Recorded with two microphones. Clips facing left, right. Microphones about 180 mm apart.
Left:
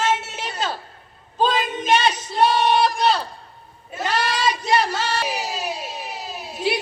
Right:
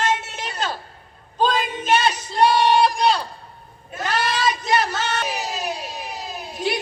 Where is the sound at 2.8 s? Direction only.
5° left (ahead or behind).